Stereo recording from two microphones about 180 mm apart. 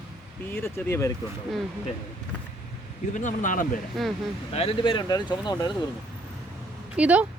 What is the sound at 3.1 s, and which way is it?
Speech, 45° left (ahead or behind).